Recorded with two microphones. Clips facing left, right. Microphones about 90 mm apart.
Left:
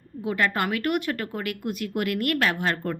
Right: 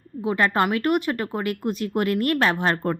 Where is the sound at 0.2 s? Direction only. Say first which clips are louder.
Right 4 dB; 30° right (ahead or behind).